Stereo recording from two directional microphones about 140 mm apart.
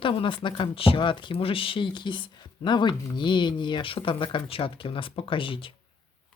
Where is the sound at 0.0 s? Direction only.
40° left (ahead or behind).